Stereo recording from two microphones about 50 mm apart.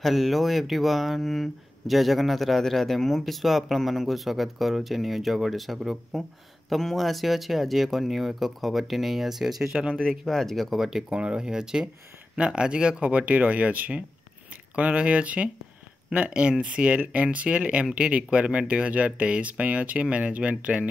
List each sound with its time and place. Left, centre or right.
0.0 s speech: centre
9.9 s speech: centre
11.1 s speech: centre